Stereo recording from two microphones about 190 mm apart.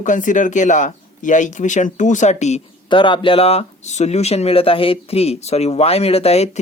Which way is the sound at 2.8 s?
25° left (ahead or behind).